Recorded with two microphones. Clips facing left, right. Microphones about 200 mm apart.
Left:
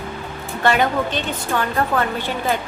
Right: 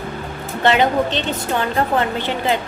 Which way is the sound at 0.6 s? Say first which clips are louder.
Right 2 dB; 20° right (ahead or behind).